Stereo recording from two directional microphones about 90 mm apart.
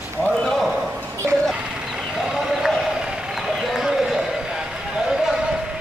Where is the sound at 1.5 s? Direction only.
5° right (ahead or behind).